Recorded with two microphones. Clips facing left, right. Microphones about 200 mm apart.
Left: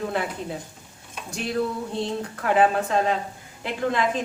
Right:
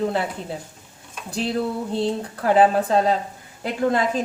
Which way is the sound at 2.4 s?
35° right (ahead or behind).